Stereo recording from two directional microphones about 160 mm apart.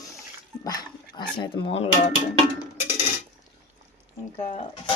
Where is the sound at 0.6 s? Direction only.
25° left (ahead or behind).